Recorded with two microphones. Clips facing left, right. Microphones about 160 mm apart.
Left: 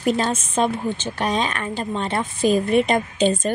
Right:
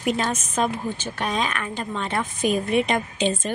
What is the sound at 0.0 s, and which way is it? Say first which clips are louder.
A woman's voice: left 3 dB; 35° left (ahead or behind).